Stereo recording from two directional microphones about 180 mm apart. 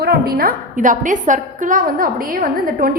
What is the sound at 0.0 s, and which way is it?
A woman's voice, 60° right (ahead or behind).